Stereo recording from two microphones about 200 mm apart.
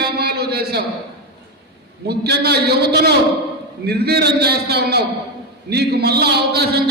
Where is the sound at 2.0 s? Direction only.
55° right (ahead or behind).